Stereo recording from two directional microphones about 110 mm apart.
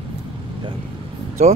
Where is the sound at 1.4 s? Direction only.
75° right (ahead or behind).